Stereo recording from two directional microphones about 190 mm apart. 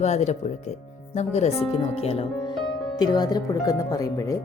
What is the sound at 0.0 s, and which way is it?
Speech, 35° left (ahead or behind).